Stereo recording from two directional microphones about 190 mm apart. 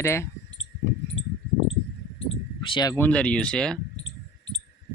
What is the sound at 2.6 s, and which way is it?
Speech, 20° left (ahead or behind).